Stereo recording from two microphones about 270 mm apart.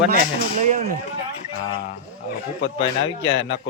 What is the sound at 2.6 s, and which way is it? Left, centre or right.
A man's voice, left.